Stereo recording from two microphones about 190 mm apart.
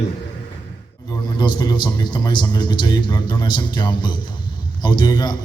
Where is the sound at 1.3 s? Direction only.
25° left (ahead or behind).